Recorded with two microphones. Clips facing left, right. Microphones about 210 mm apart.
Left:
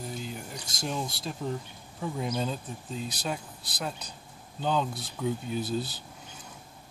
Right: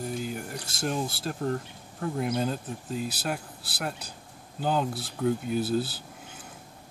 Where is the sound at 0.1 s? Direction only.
5° right (ahead or behind).